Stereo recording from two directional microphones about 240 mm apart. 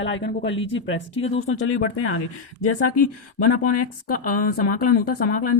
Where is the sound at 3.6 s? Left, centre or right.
Left.